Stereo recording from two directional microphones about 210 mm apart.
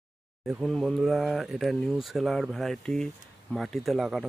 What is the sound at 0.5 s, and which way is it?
Speech, centre (ahead or behind).